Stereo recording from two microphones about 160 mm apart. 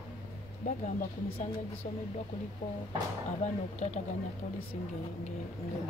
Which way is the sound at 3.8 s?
50° left (ahead or behind).